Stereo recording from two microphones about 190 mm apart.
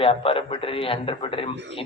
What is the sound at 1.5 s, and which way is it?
Speech, 65° right (ahead or behind).